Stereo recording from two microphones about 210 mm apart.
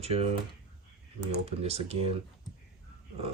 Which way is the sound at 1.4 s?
30° right (ahead or behind).